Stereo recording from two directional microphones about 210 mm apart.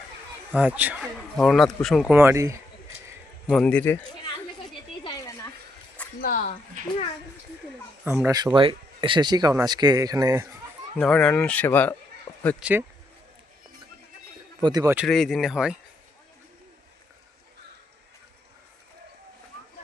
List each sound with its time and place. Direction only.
0.5 s speech: 5° right (ahead or behind)
3.5 s speech: 5° left (ahead or behind)
5.0 s a sound: 20° left (ahead or behind)
6.2 s speech: 40° left (ahead or behind)
8.0 s speech: 10° right (ahead or behind)
10.9 s speech: 5° left (ahead or behind)
14.6 s speech: 20° right (ahead or behind)
14.9 s speech: centre (ahead or behind)